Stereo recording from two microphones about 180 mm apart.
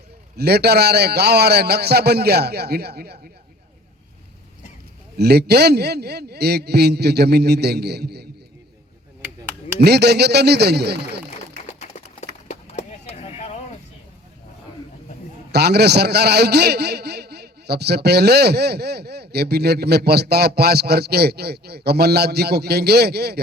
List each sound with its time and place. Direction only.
0.3 s a man's voice: 60° right (ahead or behind)
5.1 s a man's voice: 65° right (ahead or behind)
9.8 s a man's voice: 65° right (ahead or behind)
11.6 s a sound: 40° left (ahead or behind)
15.5 s a man's voice: 65° right (ahead or behind)